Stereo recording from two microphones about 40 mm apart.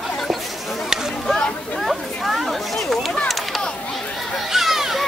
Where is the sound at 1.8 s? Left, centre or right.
Centre.